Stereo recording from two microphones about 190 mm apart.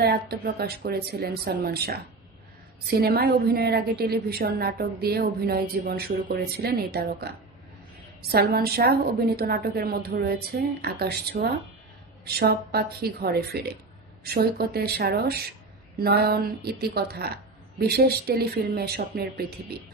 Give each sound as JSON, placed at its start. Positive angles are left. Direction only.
{"t": 0.0, "sound": "a woman's voice", "side_deg": -55}